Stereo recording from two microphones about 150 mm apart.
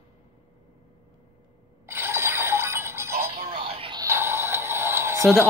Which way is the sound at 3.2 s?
40° right (ahead or behind).